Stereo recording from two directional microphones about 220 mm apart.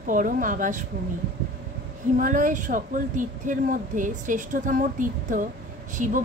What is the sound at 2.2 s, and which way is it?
Speech, 35° right (ahead or behind).